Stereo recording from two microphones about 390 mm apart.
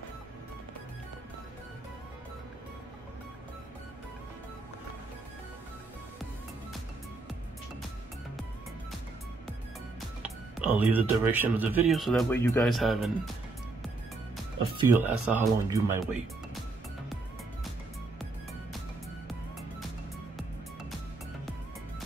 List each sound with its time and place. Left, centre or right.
9.9 s speech: centre
14.9 s speech: centre